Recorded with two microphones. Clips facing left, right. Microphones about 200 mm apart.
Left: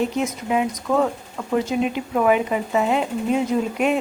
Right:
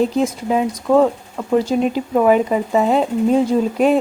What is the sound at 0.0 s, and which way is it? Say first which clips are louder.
Speech: right 5 dB; 35° right (ahead or behind).